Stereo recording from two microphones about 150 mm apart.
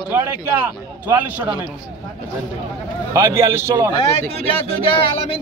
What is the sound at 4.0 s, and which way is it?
Speech, 40° left (ahead or behind).